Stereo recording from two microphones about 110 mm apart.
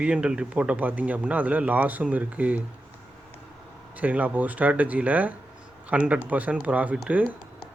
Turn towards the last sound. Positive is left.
turn(degrees=-10)  # may be behind; listen again after turning